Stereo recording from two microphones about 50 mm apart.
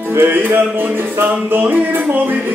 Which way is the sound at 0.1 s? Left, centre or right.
Right.